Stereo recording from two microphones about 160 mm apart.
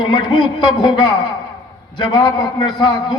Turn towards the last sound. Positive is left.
turn(degrees=30)  # may be behind; listen again after turning